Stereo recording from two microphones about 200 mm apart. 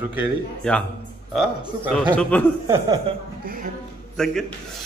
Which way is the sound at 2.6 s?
15° right (ahead or behind).